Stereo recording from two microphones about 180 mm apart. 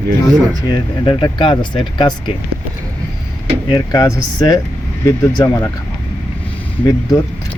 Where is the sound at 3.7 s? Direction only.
20° left (ahead or behind).